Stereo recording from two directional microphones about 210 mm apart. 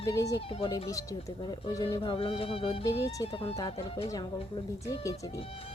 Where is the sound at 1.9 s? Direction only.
25° left (ahead or behind).